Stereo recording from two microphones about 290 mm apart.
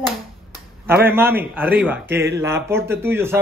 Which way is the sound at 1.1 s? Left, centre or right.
Centre.